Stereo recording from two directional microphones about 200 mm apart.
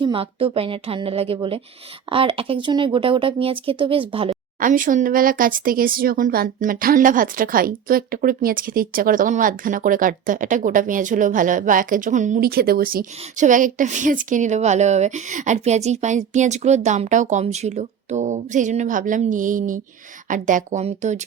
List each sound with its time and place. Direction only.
0.0 s speech: 25° right (ahead or behind)
4.6 s speech: 40° right (ahead or behind)